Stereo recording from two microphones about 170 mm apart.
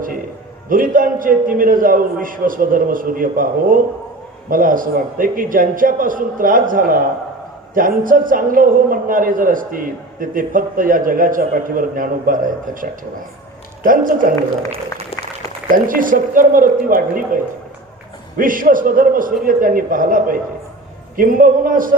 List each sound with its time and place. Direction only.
0.7 s a man's voice: 55° right (ahead or behind)
15.7 s a man's voice: 50° right (ahead or behind)
18.3 s a man's voice: 50° right (ahead or behind)